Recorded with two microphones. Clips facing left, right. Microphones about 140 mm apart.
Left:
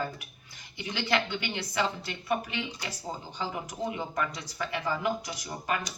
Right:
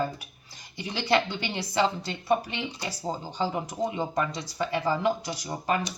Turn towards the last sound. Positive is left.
turn(degrees=-30)  # may be behind; listen again after turning